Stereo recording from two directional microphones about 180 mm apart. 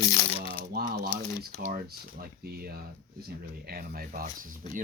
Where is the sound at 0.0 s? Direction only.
20° left (ahead or behind).